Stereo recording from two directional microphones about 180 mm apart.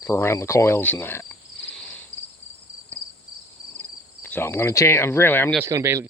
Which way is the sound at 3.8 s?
10° left (ahead or behind).